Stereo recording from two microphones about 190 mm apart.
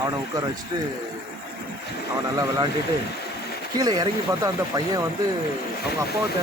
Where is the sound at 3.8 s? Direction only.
20° right (ahead or behind).